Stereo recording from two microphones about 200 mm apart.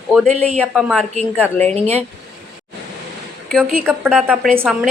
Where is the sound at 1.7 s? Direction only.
30° right (ahead or behind).